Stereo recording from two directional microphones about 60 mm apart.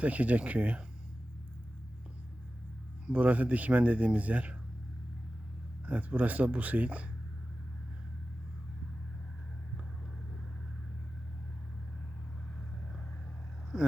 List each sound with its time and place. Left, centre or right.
0.0 s speech: right
3.1 s speech: right
5.8 s speech: right
13.7 s speech: centre